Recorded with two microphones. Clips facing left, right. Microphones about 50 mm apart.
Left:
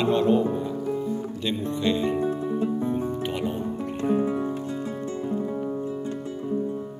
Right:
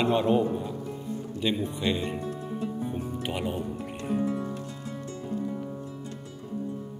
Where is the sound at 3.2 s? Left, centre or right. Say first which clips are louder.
Left 3 dB; centre.